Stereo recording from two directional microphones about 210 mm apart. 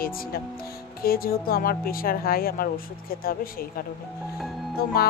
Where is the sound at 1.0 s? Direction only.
45° left (ahead or behind).